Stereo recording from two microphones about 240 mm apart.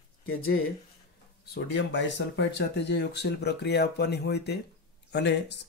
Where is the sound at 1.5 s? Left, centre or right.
Left.